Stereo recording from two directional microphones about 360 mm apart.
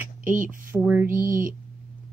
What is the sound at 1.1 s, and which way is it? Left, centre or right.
Speech, right.